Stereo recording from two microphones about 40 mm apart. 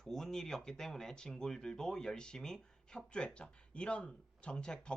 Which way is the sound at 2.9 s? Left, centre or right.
Left.